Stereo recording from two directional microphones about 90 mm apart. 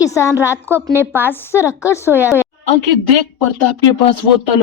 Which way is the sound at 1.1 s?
25° left (ahead or behind).